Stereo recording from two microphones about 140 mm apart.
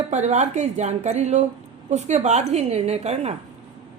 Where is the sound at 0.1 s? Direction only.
55° right (ahead or behind).